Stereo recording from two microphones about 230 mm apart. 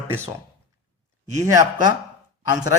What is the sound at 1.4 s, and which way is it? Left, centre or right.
Speech, centre.